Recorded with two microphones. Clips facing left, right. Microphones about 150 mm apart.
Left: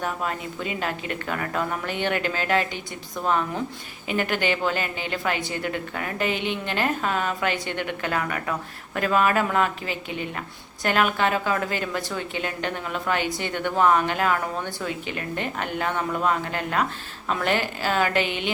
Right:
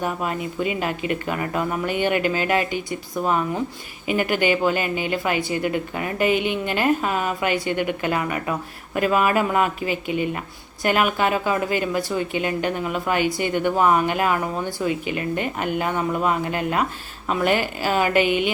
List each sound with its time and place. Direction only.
0.0 s speech: 10° right (ahead or behind)